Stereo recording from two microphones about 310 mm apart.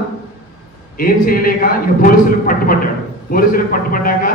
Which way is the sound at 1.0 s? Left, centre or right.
Left.